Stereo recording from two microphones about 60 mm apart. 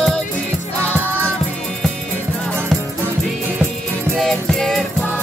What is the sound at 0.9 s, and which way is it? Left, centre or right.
Music, right.